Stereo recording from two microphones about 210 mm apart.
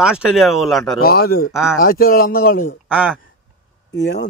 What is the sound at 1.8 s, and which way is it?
Speech, 45° left (ahead or behind).